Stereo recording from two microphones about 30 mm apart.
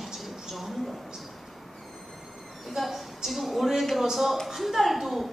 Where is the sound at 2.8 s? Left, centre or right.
Centre.